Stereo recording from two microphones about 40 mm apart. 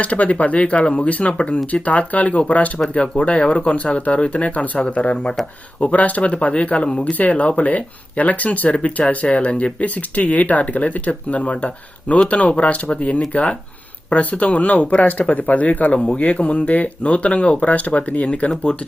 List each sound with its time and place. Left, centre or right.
0.0 s speech: left
16.0 s speech: left
16.2 s speech: left